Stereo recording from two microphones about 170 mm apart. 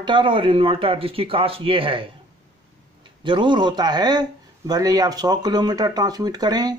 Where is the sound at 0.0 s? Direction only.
30° right (ahead or behind).